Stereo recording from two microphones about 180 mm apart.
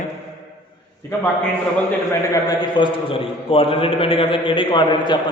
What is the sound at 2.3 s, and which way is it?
A man's voice, 20° left (ahead or behind).